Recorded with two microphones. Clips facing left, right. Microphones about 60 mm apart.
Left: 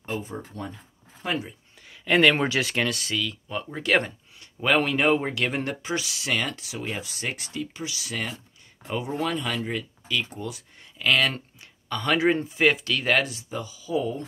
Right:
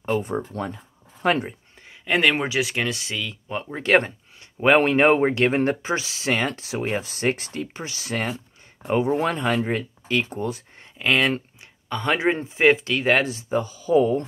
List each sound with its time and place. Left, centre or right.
0.0 s speech: right
1.8 s a sound: right
2.1 s speech: centre; by 14.2 s right